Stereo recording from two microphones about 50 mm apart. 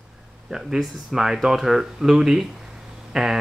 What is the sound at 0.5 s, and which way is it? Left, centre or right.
Speech, centre.